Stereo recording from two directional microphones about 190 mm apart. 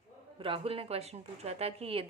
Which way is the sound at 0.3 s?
30° right (ahead or behind).